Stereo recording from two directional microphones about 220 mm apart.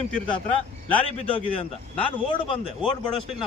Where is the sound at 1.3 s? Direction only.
25° left (ahead or behind).